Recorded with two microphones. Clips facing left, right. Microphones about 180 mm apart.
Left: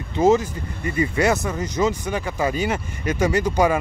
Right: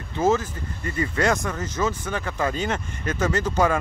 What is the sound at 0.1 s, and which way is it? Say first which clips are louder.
Speech: left 4 dB; 15° left (ahead or behind).